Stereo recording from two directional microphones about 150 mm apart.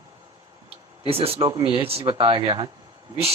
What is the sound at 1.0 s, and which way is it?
A man's voice, 40° right (ahead or behind).